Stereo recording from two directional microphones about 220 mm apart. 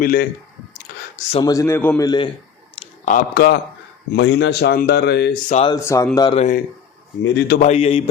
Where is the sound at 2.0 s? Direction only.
20° left (ahead or behind).